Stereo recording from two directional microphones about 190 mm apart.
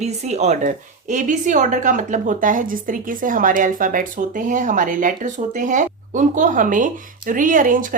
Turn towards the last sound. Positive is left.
turn(degrees=-45)  # may be behind; listen again after turning